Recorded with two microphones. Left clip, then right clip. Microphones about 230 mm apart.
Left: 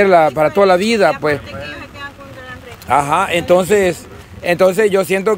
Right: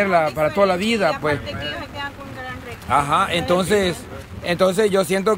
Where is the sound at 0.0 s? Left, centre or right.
Left.